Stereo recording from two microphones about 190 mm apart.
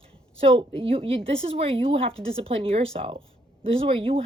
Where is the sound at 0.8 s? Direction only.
30° right (ahead or behind).